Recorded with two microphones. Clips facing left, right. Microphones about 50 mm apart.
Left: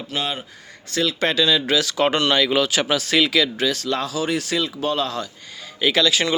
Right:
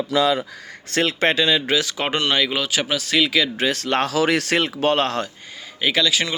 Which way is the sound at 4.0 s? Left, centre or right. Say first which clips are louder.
Right 4 dB; right.